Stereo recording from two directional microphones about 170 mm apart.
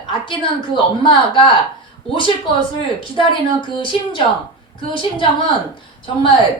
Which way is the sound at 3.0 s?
30° left (ahead or behind).